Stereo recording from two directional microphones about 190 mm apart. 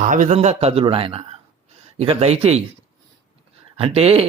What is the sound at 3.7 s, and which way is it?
Speech, 30° right (ahead or behind).